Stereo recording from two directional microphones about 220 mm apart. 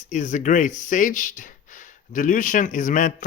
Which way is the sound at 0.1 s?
35° left (ahead or behind).